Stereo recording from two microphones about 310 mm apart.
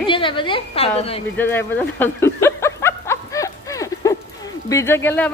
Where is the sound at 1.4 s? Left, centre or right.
Centre.